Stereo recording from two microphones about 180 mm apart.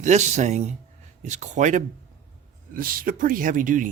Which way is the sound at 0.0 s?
40° right (ahead or behind).